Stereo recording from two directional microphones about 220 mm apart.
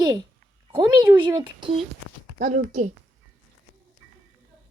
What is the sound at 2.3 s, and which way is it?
Speech, 35° right (ahead or behind).